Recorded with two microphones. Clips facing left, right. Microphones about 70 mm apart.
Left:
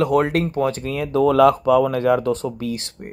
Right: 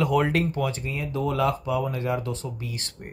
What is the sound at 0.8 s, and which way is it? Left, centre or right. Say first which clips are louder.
Speech: left 10 dB; left.